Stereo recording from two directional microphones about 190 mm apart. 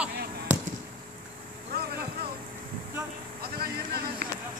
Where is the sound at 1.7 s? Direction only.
55° right (ahead or behind).